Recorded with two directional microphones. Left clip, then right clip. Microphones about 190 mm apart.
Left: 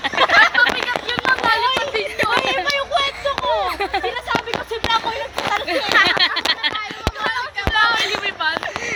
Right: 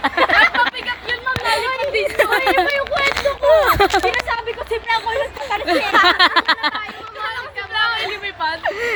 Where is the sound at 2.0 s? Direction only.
35° right (ahead or behind).